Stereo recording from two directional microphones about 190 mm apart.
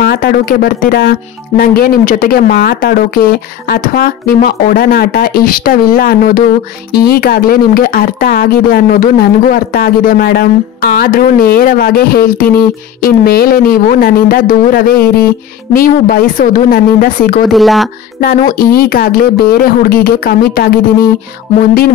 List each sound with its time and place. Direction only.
0.0 s speech: 55° left (ahead or behind)
17.5 s speech: centre (ahead or behind)
18.2 s speech: 50° left (ahead or behind)